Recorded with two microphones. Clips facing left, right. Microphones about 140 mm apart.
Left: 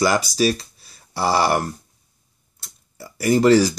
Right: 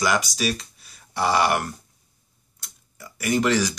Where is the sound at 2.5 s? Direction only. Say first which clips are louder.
Left 5 dB; 35° left (ahead or behind).